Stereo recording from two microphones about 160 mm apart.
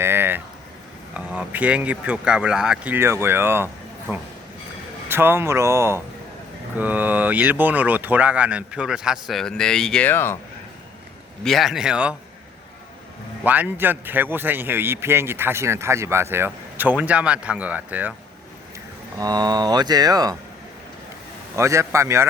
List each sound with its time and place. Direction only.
0.0 s a sound: 15° right (ahead or behind)
1.1 s speech: 10° right (ahead or behind)
5.0 s speech: 15° right (ahead or behind); by 10.3 s 15° left (ahead or behind)
11.4 s speech: centre (ahead or behind)
13.4 s speech: 10° right (ahead or behind)
19.2 s speech: 25° right (ahead or behind)
21.5 s speech: 20° right (ahead or behind)